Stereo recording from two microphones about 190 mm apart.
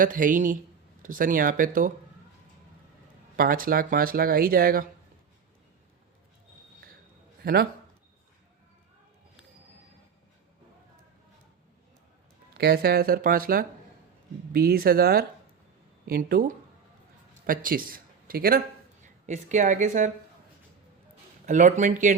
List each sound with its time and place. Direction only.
0.0 s speech: 45° right (ahead or behind)
3.3 s speech: 50° right (ahead or behind)
7.4 s speech: 55° right (ahead or behind)
12.5 s speech: 55° right (ahead or behind)
19.0 s speech: 40° right (ahead or behind)
21.4 s speech: 40° right (ahead or behind)